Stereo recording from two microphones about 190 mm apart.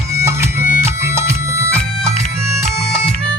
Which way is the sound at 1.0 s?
15° right (ahead or behind).